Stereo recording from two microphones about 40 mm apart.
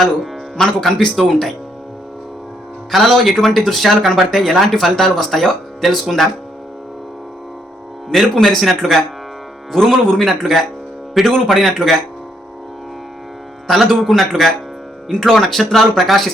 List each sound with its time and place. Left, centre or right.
0.5 s speech: centre
2.9 s speech: centre
8.1 s speech: centre
13.7 s speech: centre